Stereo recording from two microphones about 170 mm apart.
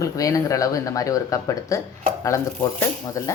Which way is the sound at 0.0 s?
20° left (ahead or behind).